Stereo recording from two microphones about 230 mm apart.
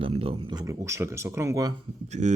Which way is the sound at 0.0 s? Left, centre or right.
Right.